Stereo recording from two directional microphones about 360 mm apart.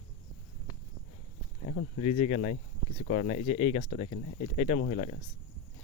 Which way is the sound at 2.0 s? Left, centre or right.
Centre.